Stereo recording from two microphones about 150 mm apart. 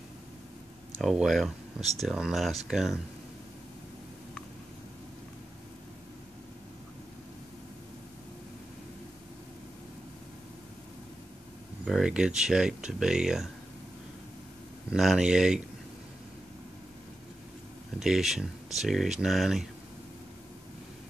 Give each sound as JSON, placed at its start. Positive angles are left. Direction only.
{"t": 1.0, "sound": "speech", "side_deg": 0}
{"t": 11.8, "sound": "speech", "side_deg": -5}
{"t": 14.9, "sound": "speech", "side_deg": -5}
{"t": 17.9, "sound": "speech", "side_deg": -5}